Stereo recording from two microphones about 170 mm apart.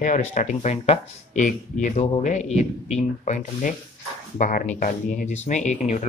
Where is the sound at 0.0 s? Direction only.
45° left (ahead or behind).